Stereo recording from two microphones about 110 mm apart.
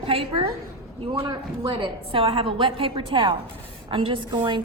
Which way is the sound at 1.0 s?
40° right (ahead or behind).